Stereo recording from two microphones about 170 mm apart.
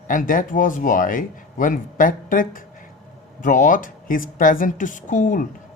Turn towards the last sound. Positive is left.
turn(degrees=50)  # may be behind; listen again after turning